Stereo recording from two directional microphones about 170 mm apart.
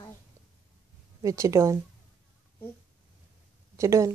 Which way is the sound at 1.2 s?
20° right (ahead or behind).